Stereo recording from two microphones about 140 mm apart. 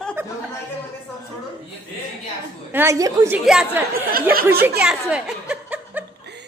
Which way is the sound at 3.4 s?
5° right (ahead or behind).